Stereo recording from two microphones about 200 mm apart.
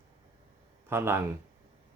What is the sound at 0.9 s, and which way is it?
Speech, 10° right (ahead or behind).